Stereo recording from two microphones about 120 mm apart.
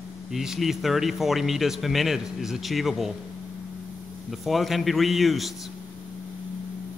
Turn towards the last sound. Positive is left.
turn(degrees=0)  # may be behind; listen again after turning